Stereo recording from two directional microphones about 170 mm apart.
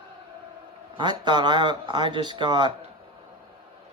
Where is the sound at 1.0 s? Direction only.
25° right (ahead or behind).